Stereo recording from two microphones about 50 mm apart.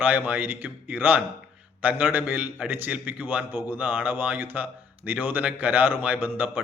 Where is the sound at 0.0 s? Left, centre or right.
Right.